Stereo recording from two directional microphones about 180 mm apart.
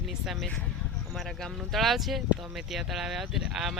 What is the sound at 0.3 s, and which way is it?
Speech, 5° left (ahead or behind).